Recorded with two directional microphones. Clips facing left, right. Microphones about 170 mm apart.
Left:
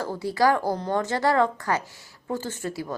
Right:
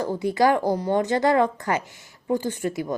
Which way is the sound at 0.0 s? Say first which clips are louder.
Right 2 dB; 20° right (ahead or behind).